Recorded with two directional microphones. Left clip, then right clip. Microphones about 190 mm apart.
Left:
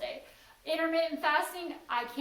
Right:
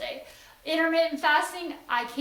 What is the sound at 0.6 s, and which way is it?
A woman's voice, 25° right (ahead or behind).